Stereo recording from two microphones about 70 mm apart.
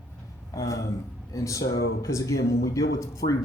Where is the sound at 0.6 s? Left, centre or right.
Left.